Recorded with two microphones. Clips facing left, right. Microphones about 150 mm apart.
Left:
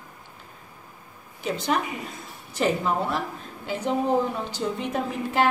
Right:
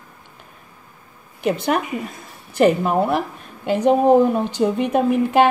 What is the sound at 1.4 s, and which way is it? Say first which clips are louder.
A woman's voice: right 6 dB; 65° right (ahead or behind).